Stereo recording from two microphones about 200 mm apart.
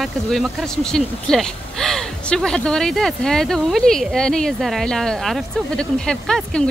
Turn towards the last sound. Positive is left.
turn(degrees=5)  # may be behind; listen again after turning